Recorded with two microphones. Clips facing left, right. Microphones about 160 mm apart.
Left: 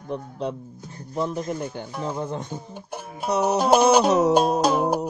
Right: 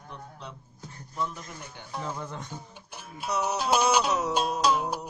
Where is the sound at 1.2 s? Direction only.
35° left (ahead or behind).